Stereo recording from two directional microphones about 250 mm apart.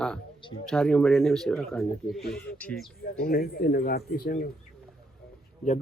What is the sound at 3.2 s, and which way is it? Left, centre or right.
Speech, left.